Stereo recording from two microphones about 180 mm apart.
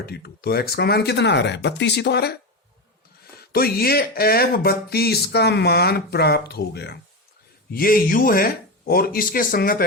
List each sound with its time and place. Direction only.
0.0 s speech: 60° left (ahead or behind)
3.5 s speech: 60° left (ahead or behind)